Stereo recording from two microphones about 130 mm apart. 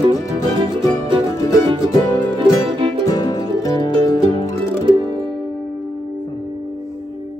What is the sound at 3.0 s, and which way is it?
Music, 30° left (ahead or behind).